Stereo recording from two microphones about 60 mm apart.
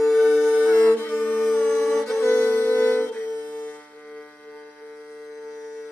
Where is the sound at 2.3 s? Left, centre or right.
Left.